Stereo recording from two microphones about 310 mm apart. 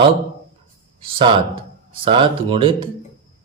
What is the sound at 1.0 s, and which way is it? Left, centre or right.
Speech, centre.